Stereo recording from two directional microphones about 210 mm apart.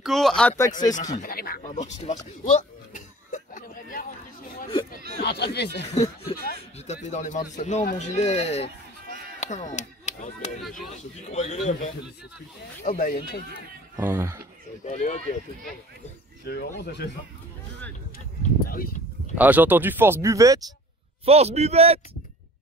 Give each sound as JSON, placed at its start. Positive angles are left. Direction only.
{"t": 0.0, "sound": "speech", "side_deg": 0}
{"t": 1.1, "sound": "speech", "side_deg": 45}
{"t": 1.7, "sound": "a sound", "side_deg": 35}
{"t": 5.2, "sound": "speech", "side_deg": 50}
{"t": 6.9, "sound": "speech", "side_deg": 35}
{"t": 12.8, "sound": "speech", "side_deg": 45}
{"t": 13.9, "sound": "speech", "side_deg": -10}
{"t": 14.9, "sound": "speech", "side_deg": 35}
{"t": 16.4, "sound": "speech", "side_deg": 50}
{"t": 18.7, "sound": "speech", "side_deg": 45}
{"t": 19.3, "sound": "speech", "side_deg": -10}
{"t": 21.3, "sound": "a man's voice", "side_deg": -30}